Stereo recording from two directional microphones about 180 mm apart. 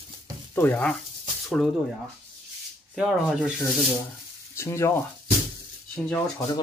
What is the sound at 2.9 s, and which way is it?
Speech, centre (ahead or behind).